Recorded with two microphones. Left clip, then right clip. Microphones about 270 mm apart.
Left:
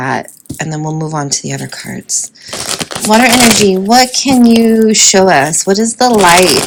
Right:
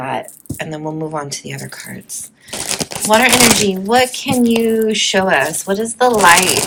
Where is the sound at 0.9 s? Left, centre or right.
Centre.